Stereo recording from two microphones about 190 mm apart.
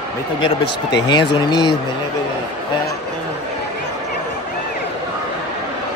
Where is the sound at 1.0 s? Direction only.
25° left (ahead or behind).